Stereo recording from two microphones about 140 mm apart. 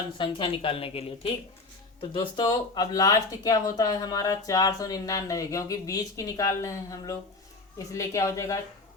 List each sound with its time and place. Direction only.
0.2 s a woman's voice: 40° left (ahead or behind); by 8.6 s 20° left (ahead or behind)